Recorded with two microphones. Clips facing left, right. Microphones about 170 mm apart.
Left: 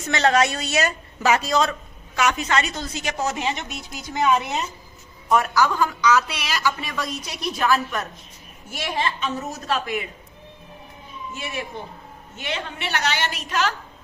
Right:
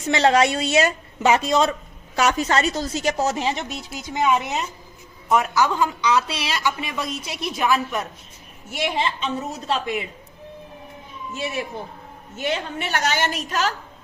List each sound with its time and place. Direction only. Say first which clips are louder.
0.0 s a woman's voice: right 2 dB; 30° right (ahead or behind)
2.1 s a woman's voice: right 2 dB; 35° right (ahead or behind)
3.9 s a woman's voice: even; 15° right (ahead or behind)
12.4 s a woman's voice: right 5 dB; 40° right (ahead or behind)